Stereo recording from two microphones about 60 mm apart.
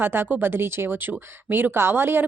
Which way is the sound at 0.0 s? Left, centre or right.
Right.